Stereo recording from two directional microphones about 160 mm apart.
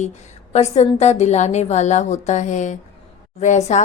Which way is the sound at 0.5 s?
45° left (ahead or behind).